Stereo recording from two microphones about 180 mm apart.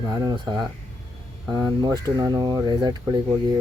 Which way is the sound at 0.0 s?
20° right (ahead or behind).